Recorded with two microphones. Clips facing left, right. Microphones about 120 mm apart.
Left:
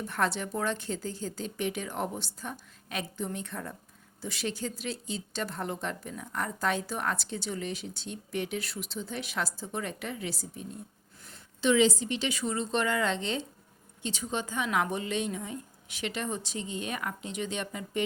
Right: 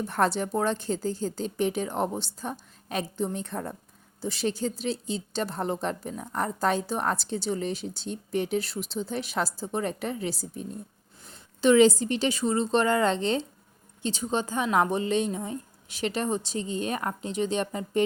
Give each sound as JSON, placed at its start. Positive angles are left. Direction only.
{"t": 0.0, "sound": "speech", "side_deg": -35}